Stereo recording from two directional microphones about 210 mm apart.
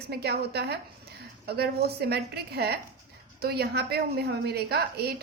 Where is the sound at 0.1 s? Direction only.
50° right (ahead or behind).